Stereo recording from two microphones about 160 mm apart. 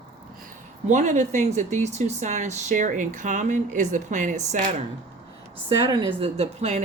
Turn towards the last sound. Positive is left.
turn(degrees=-45)  # may be behind; listen again after turning